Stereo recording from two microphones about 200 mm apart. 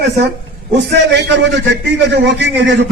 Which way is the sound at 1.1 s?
60° right (ahead or behind).